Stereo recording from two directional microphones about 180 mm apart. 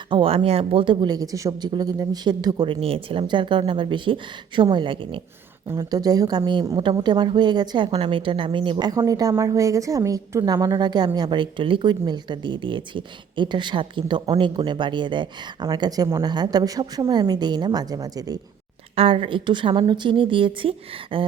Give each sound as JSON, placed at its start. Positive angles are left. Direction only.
{"t": 0.1, "sound": "a woman's voice", "side_deg": -30}
{"t": 2.8, "sound": "a woman's voice", "side_deg": -30}
{"t": 18.9, "sound": "a woman's voice", "side_deg": -30}